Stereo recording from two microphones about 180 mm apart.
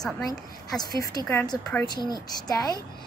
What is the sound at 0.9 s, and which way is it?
Speech, 20° left (ahead or behind).